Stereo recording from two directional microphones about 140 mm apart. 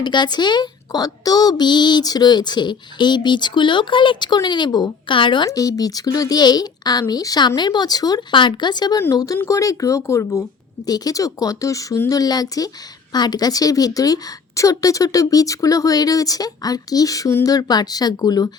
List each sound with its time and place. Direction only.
0.0 s a child's voice: 30° left (ahead or behind)
5.5 s a woman's voice: 25° left (ahead or behind)